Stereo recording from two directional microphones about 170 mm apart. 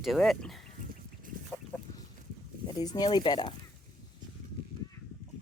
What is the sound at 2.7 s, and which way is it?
Speech, 25° left (ahead or behind).